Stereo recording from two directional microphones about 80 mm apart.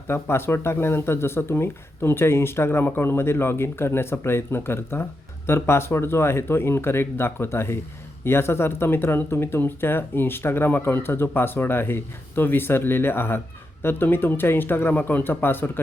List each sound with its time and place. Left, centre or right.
0.1 s speech: left